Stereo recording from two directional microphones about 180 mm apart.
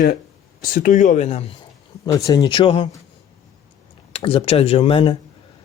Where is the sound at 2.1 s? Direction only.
20° left (ahead or behind).